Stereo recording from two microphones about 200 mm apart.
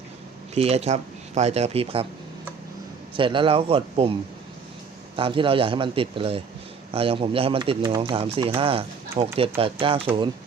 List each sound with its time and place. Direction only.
0.5 s speech: 30° right (ahead or behind)
3.2 s speech: 25° right (ahead or behind)
5.1 s speech: 25° right (ahead or behind)